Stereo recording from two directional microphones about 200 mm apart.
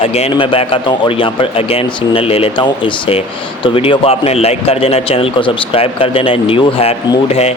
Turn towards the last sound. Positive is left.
turn(degrees=30)  # may be behind; listen again after turning